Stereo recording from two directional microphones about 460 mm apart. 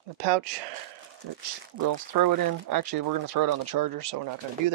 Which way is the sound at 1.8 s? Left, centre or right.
Right.